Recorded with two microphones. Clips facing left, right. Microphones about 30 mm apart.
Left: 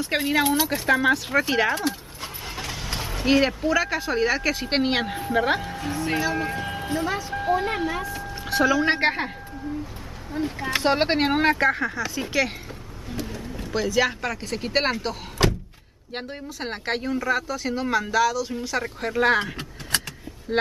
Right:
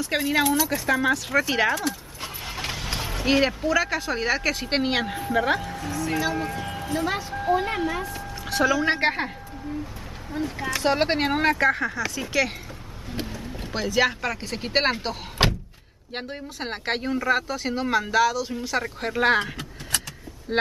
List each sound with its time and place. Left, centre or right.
0.1 s speech: centre
1.5 s speech: centre
2.7 s vehicle: centre
3.3 s speech: centre
5.9 s speech: left
6.3 s a woman's voice: centre
10.3 s speech: centre
10.8 s speech: centre
13.6 s speech: centre
15.4 s door: right
16.1 s speech: centre